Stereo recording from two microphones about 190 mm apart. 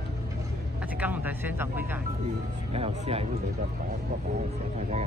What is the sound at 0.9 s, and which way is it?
Speech, 10° right (ahead or behind).